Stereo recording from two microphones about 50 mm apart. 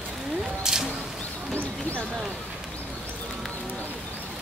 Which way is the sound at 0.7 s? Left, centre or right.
Centre.